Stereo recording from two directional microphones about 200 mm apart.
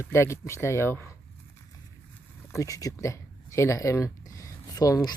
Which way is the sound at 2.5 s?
15° left (ahead or behind).